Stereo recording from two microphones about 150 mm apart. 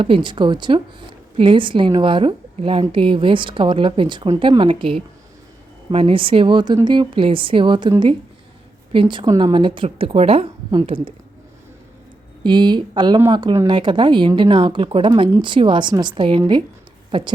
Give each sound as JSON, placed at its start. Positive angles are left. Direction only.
{"t": 0.0, "sound": "a woman's voice", "side_deg": -35}
{"t": 12.4, "sound": "a woman's voice", "side_deg": -30}